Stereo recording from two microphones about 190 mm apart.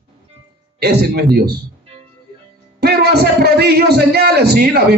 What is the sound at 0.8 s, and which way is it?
Speech, 55° right (ahead or behind).